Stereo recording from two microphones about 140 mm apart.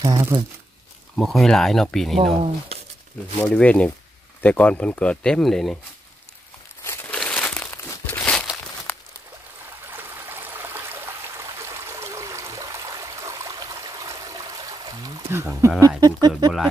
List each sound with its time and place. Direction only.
0.0 s speech: 25° right (ahead or behind)
1.1 s speech: centre (ahead or behind)
3.4 s speech: 10° left (ahead or behind)
6.8 s crumpling: 15° left (ahead or behind)
7.7 s crumpling: 20° left (ahead or behind)
8.2 s crumpling: 10° left (ahead or behind)
8.9 s a sound: 10° left (ahead or behind)
9.8 s stream: 15° right (ahead or behind)
16.0 s a sound: 30° right (ahead or behind)